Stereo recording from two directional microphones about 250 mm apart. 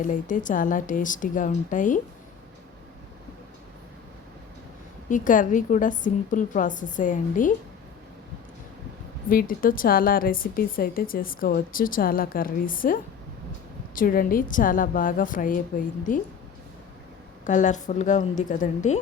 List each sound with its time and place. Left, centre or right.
0.0 s a woman's voice: left
5.0 s a woman's voice: left
9.3 s a woman's voice: left
17.4 s a woman's voice: left